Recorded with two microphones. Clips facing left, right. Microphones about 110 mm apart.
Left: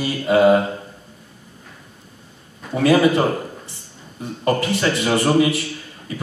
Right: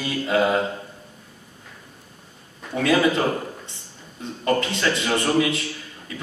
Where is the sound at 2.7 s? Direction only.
20° left (ahead or behind).